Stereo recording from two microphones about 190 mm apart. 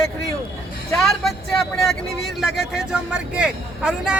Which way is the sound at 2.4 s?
Centre (ahead or behind).